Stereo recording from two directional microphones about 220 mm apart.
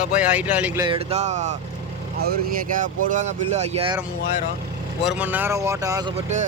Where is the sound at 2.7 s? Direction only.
35° right (ahead or behind).